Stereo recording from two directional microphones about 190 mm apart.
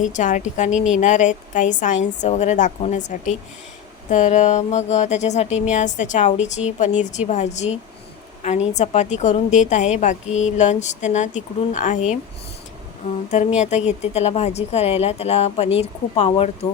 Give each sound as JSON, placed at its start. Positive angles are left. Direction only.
{"t": 0.0, "sound": "a woman's voice", "side_deg": 40}
{"t": 13.6, "sound": "speech", "side_deg": 35}